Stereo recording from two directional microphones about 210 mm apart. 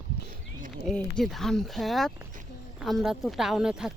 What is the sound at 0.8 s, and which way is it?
Speech, centre (ahead or behind).